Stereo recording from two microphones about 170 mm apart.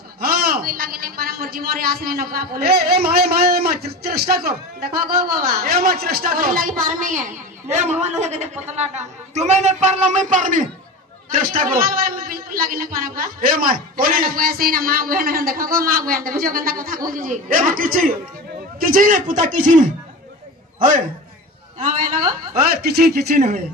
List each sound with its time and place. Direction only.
0.2 s a woman's voice: 60° right (ahead or behind)
21.8 s a woman's voice: 55° right (ahead or behind)